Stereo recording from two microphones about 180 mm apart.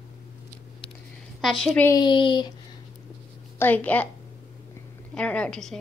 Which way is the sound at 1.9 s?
25° left (ahead or behind).